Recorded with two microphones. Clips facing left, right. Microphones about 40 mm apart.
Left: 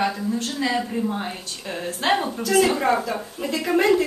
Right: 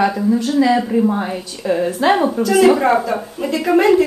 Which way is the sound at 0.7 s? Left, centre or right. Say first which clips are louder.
Right 9 dB; right.